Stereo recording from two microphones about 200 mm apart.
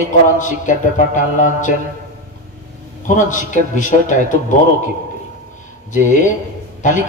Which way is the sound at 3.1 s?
40° left (ahead or behind).